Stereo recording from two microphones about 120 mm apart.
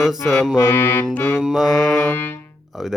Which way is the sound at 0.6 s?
20° left (ahead or behind).